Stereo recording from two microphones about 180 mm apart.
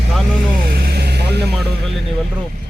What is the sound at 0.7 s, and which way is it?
Vehicle, 60° right (ahead or behind).